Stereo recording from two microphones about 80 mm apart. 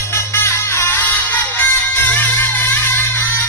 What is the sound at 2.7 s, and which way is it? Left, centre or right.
Music, left.